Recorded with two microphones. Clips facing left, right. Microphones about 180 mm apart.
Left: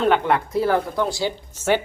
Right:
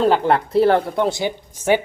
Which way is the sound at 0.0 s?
35° right (ahead or behind).